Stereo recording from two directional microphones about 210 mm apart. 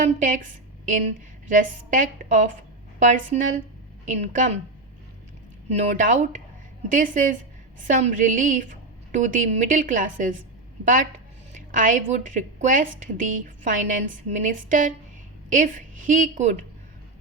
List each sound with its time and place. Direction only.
0.0 s a woman's voice: 35° right (ahead or behind)
1.5 s a woman's voice: 35° right (ahead or behind)
5.6 s a woman's voice: 35° right (ahead or behind)
11.5 s a woman's voice: 40° right (ahead or behind)